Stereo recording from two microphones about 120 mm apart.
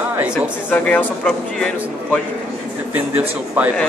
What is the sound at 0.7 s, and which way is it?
Speech, 10° left (ahead or behind).